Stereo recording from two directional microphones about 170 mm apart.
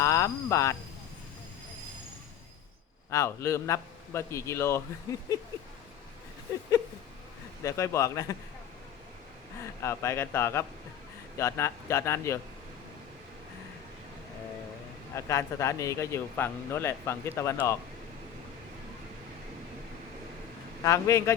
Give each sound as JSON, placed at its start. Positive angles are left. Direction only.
{"t": 0.0, "sound": "speech", "side_deg": 15}
{"t": 3.1, "sound": "a man's voice", "side_deg": 15}
{"t": 7.6, "sound": "a man's voice", "side_deg": 20}
{"t": 9.8, "sound": "speech", "side_deg": 15}
{"t": 15.1, "sound": "speech", "side_deg": 15}
{"t": 20.8, "sound": "speech", "side_deg": 20}